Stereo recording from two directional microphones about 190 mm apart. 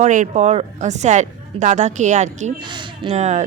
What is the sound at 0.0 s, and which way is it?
Speech, 40° right (ahead or behind).